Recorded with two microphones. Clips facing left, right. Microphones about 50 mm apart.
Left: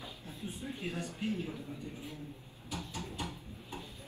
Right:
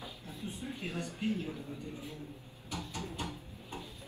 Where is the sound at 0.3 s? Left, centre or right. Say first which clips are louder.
Even; right.